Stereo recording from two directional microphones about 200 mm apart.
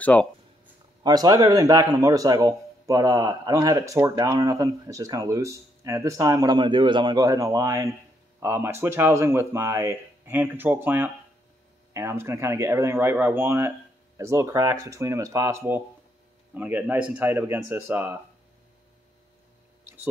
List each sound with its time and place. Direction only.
0.0 s speech: 5° left (ahead or behind)
1.0 s speech: 20° right (ahead or behind)